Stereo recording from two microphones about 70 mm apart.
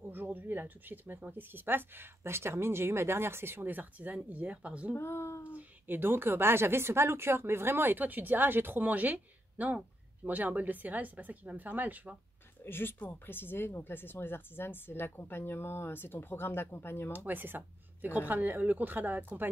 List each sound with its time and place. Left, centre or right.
0.0 s a woman's voice: right
4.9 s speech: left
5.5 s a woman's voice: right
12.6 s speech: left
17.1 s a woman's voice: right